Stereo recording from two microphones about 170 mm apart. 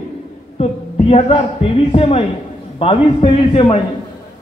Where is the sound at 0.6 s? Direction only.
35° left (ahead or behind).